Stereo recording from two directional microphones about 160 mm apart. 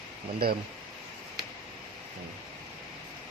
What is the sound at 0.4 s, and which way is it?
Speech, 70° right (ahead or behind).